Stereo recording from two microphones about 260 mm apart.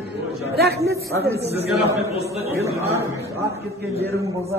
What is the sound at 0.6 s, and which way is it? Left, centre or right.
Speech, right.